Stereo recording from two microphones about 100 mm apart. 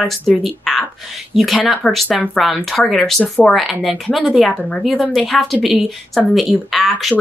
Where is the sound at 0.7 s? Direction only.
Centre (ahead or behind).